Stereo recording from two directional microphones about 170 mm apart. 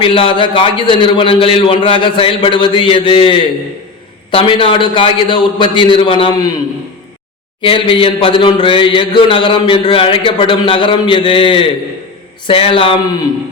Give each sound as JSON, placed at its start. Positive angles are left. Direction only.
{"t": 0.0, "sound": "a man's voice", "side_deg": 30}
{"t": 7.6, "sound": "a man's voice", "side_deg": 30}